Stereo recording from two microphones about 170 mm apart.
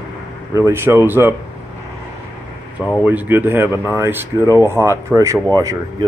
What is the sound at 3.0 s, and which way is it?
Speech, 10° right (ahead or behind).